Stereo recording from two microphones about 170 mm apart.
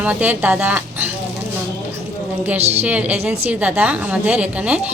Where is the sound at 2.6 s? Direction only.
40° right (ahead or behind).